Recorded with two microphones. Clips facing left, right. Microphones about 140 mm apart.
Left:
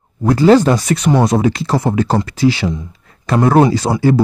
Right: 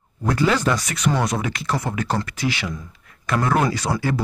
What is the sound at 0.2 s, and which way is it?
Speech, 35° left (ahead or behind).